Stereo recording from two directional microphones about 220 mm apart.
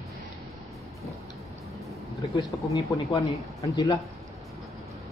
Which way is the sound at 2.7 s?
15° left (ahead or behind).